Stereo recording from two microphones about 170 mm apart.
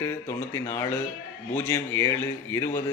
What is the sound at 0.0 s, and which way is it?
A man's voice, 15° left (ahead or behind).